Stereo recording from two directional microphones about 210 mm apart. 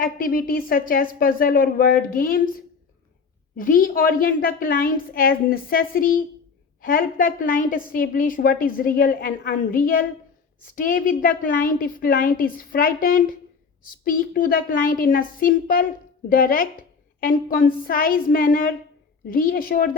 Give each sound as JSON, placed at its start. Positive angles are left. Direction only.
{"t": 0.0, "sound": "a woman's voice", "side_deg": 40}
{"t": 3.6, "sound": "a woman's voice", "side_deg": 40}